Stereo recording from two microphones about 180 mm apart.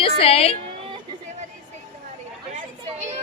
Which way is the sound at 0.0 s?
30° left (ahead or behind).